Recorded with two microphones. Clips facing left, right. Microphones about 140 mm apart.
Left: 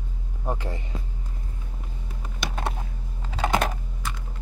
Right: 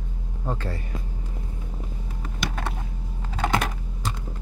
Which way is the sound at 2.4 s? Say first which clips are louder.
Even; 20° left (ahead or behind).